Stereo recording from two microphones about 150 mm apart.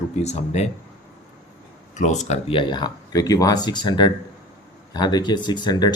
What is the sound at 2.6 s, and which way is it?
Speech, 30° left (ahead or behind).